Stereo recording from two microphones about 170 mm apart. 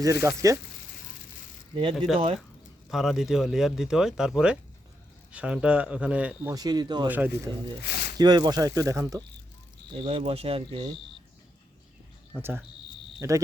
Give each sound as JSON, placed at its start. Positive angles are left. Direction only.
{"t": 0.0, "sound": "speech", "side_deg": -15}
{"t": 1.7, "sound": "speech", "side_deg": -30}
{"t": 2.9, "sound": "speech", "side_deg": 0}
{"t": 6.5, "sound": "speech", "side_deg": -20}
{"t": 7.1, "sound": "speech", "side_deg": -10}
{"t": 7.9, "sound": "a sound", "side_deg": 70}
{"t": 8.2, "sound": "speech", "side_deg": -25}
{"t": 9.9, "sound": "speech", "side_deg": -35}
{"t": 12.3, "sound": "speech", "side_deg": -15}